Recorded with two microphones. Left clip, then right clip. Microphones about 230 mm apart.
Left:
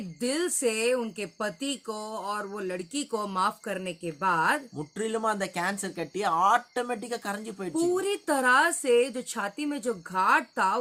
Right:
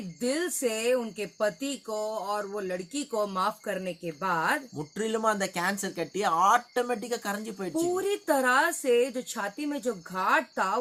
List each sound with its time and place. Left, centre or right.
0.2 s speech: left
4.8 s speech: centre
7.9 s speech: left